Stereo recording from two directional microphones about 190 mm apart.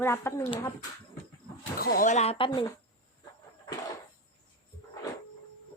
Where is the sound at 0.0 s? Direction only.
15° left (ahead or behind).